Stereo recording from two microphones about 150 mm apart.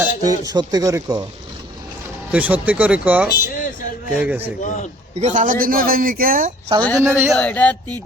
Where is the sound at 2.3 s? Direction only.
10° right (ahead or behind).